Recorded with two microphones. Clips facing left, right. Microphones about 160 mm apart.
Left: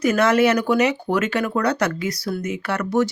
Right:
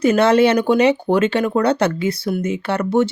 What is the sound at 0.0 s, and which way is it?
Speech, 30° right (ahead or behind).